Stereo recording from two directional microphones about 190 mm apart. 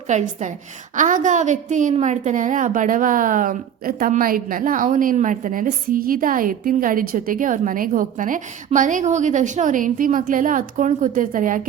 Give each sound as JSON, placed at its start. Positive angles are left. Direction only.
{"t": 0.1, "sound": "a woman's voice", "side_deg": -40}